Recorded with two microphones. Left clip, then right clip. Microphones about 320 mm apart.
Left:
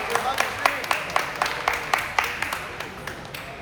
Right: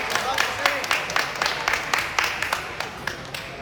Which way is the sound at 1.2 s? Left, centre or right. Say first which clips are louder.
Right 1 dB; left.